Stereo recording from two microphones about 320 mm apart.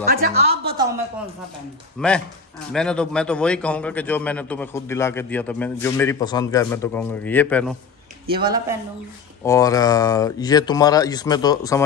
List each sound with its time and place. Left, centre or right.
0.0 s a woman's voice: right
2.0 s a man's voice: centre
9.4 s speech: centre